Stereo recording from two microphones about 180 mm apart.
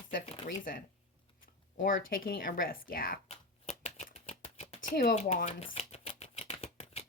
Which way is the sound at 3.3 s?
40° left (ahead or behind).